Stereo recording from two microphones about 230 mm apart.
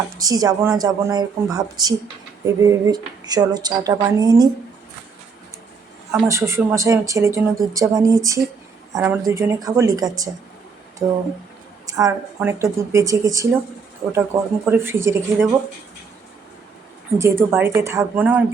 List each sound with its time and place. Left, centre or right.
0.2 s speech: centre
6.2 s speech: centre
17.2 s speech: centre